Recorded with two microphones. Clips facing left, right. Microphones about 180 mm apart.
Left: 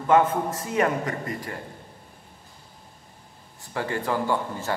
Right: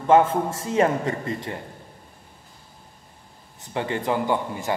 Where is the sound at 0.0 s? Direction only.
25° right (ahead or behind).